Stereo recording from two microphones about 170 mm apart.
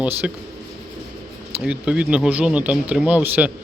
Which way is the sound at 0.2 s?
5° right (ahead or behind).